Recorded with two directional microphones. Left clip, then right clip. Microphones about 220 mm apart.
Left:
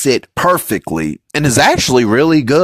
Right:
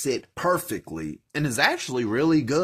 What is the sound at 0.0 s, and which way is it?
Speech, 55° left (ahead or behind).